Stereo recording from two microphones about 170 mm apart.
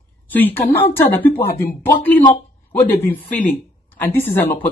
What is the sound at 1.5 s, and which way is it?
Speech, 60° left (ahead or behind).